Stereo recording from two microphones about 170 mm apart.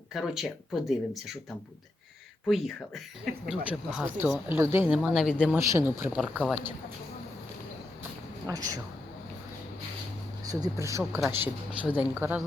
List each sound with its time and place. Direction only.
0.1 s speech: centre (ahead or behind)
2.5 s speech: centre (ahead or behind)
5.0 s speech: centre (ahead or behind)
5.5 s speech: 15° right (ahead or behind)
6.1 s speech: centre (ahead or behind)
8.4 s speech: 20° right (ahead or behind)
10.5 s speech: 20° right (ahead or behind)